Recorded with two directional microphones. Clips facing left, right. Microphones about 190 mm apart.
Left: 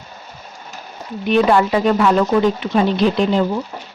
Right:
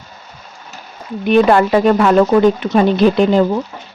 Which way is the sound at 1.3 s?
55° right (ahead or behind).